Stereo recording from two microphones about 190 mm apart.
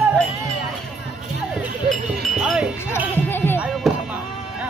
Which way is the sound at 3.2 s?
10° left (ahead or behind).